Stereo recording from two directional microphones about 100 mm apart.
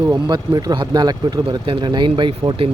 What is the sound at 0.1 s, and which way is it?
Speech, 45° right (ahead or behind).